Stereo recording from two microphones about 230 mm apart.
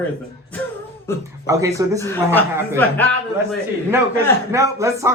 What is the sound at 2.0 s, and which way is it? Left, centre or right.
Speech, centre.